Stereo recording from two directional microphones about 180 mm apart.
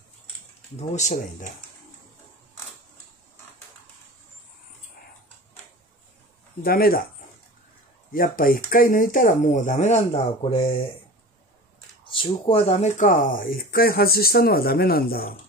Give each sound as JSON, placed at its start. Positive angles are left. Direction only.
{"t": 0.7, "sound": "speech", "side_deg": 40}
{"t": 6.6, "sound": "speech", "side_deg": 55}
{"t": 8.1, "sound": "speech", "side_deg": 50}
{"t": 12.1, "sound": "speech", "side_deg": 30}